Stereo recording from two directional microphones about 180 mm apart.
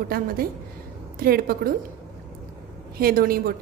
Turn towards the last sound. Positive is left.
turn(degrees=-55)  # may be behind; listen again after turning